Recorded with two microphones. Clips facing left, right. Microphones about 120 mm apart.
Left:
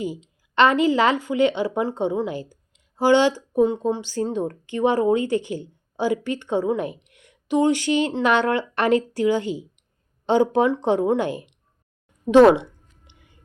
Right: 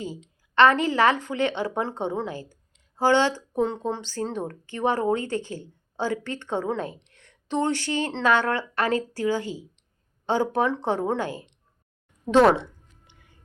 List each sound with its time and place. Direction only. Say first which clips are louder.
0.0 s speech: left 6 dB; 15° left (ahead or behind)
13.1 s chewing: left 3 dB; 20° left (ahead or behind)